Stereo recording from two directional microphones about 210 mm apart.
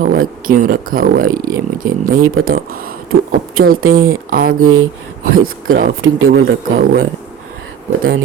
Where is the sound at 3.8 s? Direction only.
90° right.